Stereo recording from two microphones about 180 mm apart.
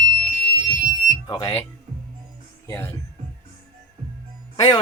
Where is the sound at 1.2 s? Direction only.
20° left (ahead or behind).